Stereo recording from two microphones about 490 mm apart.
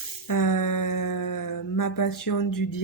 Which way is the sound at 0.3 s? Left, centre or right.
Left.